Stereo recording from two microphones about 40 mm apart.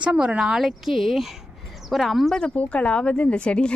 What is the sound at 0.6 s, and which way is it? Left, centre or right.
Speech, centre.